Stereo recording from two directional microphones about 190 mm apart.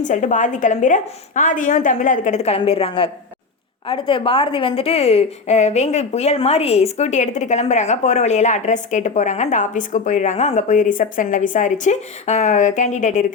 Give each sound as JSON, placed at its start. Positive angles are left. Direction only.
{"t": 0.0, "sound": "a woman's voice", "side_deg": 40}